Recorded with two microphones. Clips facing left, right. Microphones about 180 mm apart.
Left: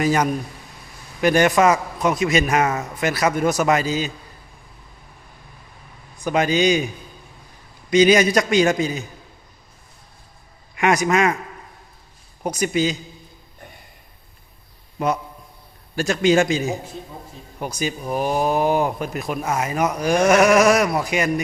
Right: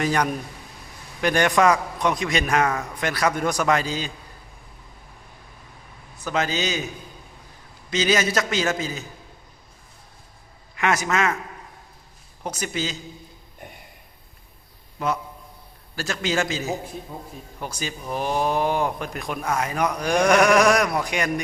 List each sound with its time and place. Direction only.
0.0 s speech: 5° left (ahead or behind)
6.2 s speech: 15° left (ahead or behind)
7.9 s speech: 15° left (ahead or behind)
10.8 s speech: 15° left (ahead or behind)
12.4 s speech: 15° left (ahead or behind)
14.9 s a man's voice: 20° left (ahead or behind)
17.7 s speech: 10° left (ahead or behind)
20.2 s sheep: 5° left (ahead or behind)